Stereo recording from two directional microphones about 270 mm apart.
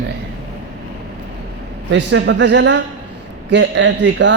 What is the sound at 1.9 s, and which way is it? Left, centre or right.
Speech, right.